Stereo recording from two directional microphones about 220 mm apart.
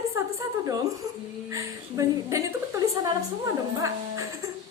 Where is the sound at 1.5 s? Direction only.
15° right (ahead or behind).